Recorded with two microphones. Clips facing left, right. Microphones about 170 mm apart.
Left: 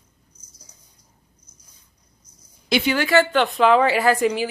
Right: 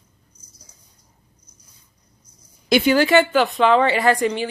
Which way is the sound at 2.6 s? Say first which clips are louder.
Right 5 dB; 45° right (ahead or behind).